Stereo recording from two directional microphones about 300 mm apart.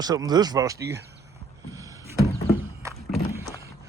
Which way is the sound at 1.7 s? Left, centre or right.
Centre.